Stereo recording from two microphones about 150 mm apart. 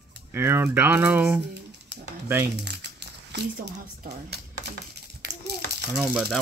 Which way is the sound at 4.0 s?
65° right (ahead or behind).